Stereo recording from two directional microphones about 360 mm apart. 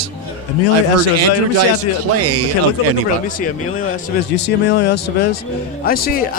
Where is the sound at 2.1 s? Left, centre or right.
Right.